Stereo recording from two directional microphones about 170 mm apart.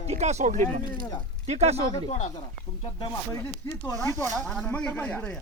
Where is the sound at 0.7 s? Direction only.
55° right (ahead or behind).